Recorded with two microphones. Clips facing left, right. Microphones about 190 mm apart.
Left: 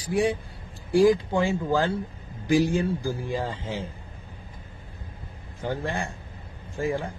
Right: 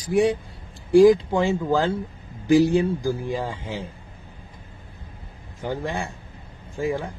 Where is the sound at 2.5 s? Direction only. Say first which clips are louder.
Right 5 dB; 15° left (ahead or behind).